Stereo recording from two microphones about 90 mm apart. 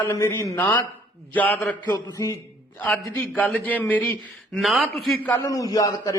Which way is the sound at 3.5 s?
20° left (ahead or behind).